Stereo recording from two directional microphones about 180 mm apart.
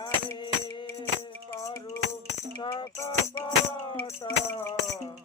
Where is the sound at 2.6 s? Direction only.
20° left (ahead or behind).